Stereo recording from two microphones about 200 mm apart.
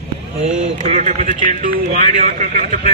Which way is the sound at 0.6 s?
40° right (ahead or behind).